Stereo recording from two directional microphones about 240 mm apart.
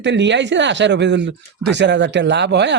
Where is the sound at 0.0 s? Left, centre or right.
Right.